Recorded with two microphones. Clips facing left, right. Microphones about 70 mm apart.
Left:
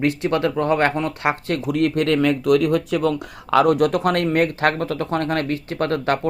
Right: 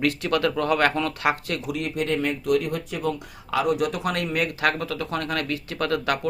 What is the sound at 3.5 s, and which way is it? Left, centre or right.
Speech, left.